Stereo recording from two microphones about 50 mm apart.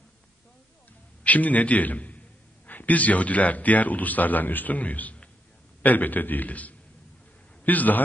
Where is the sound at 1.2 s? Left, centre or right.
Left.